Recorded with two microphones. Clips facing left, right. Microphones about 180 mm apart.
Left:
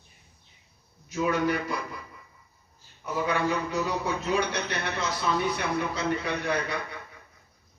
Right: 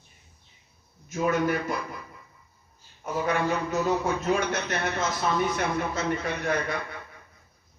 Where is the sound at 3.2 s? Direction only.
45° right (ahead or behind).